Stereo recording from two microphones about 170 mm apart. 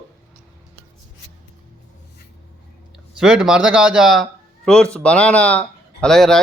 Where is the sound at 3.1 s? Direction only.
5° right (ahead or behind).